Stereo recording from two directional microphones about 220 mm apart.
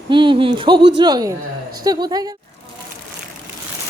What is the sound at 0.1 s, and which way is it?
A woman's voice, 20° right (ahead or behind).